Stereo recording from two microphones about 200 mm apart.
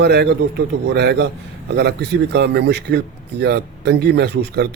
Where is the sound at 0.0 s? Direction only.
55° right (ahead or behind).